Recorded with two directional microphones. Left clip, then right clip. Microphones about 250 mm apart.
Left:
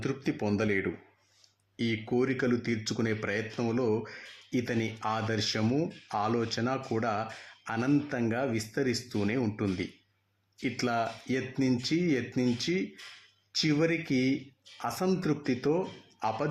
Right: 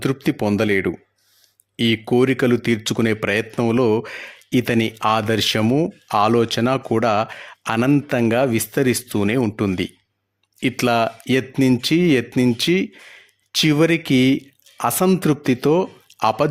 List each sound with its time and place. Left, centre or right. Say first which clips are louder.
0.0 s a man's voice: right 11 dB; right